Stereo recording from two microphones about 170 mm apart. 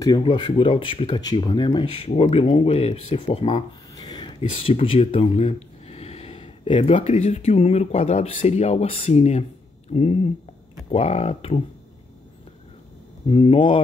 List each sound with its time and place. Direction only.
0.0 s speech: 25° left (ahead or behind)
3.9 s speech: 20° left (ahead or behind)
13.3 s speech: 30° left (ahead or behind)